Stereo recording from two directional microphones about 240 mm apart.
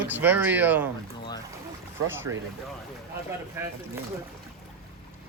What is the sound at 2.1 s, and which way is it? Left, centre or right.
Speech, centre.